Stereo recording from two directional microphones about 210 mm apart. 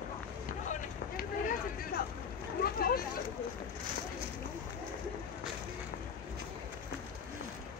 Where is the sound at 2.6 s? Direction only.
45° left (ahead or behind).